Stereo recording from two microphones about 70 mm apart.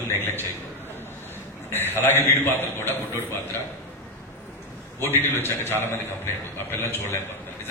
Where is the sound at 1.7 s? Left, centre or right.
Left.